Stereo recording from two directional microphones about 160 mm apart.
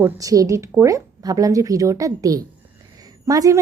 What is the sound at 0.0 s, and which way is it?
A woman's voice, 20° right (ahead or behind).